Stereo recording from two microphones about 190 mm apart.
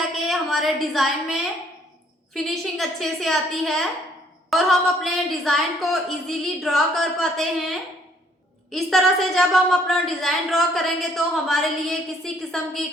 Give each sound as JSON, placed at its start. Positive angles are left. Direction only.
{"t": 0.0, "sound": "a woman's voice", "side_deg": 0}